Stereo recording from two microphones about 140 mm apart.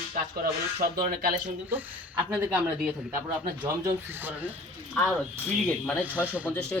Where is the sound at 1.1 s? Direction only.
90° right.